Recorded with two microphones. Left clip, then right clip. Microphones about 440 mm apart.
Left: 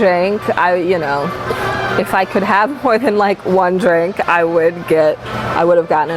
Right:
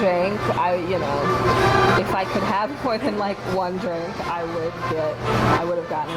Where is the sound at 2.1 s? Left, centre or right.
Left.